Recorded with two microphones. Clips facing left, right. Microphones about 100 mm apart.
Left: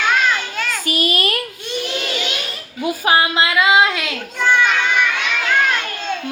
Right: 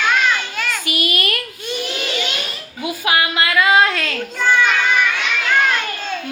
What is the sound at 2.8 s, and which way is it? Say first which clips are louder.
Music: left 3 dB; 35° left (ahead or behind).